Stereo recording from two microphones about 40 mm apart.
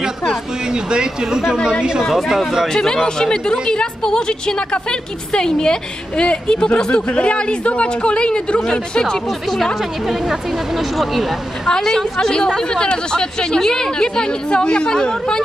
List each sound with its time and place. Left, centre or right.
0.8 s speech: right
2.0 s speech: centre
2.3 s speech: centre
2.7 s a woman's voice: centre
8.9 s speech: centre
10.8 s speech: centre
11.6 s a woman's voice: centre